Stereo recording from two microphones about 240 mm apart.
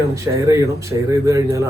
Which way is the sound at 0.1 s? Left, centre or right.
Centre.